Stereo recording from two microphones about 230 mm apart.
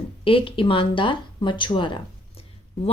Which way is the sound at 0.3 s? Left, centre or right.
Left.